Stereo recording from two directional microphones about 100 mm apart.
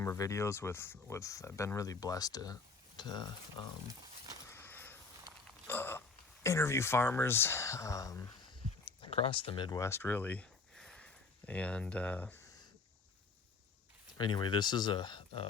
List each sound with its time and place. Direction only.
0.0 s speech: 30° left (ahead or behind); by 3.2 s 50° left (ahead or behind)
4.4 s crow: 20° left (ahead or behind)
5.6 s hiccup: 20° left (ahead or behind)
6.4 s speech: 30° left (ahead or behind)
9.0 s speech: 75° left (ahead or behind)
9.7 s speech: 25° left (ahead or behind)
10.8 s a sound: 5° left (ahead or behind)
14.2 s speech: 50° left (ahead or behind)